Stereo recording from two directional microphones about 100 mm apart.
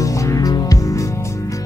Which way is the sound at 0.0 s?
35° left (ahead or behind).